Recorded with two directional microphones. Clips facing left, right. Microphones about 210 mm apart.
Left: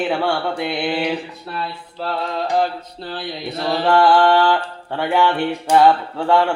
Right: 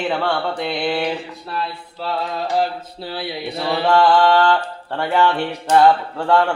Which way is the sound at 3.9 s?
5° left (ahead or behind).